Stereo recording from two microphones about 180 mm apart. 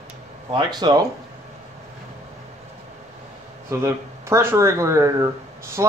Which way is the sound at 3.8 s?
15° right (ahead or behind).